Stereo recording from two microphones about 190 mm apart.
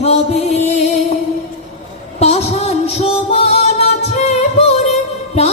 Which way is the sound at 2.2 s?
35° left (ahead or behind).